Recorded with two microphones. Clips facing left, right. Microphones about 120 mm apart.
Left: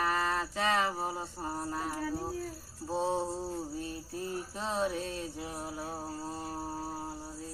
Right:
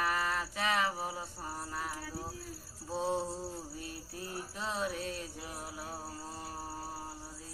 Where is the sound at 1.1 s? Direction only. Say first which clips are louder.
Left 4 dB; 35° left (ahead or behind).